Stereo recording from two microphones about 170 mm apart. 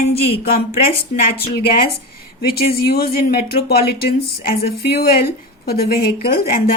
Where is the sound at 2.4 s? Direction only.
65° left (ahead or behind).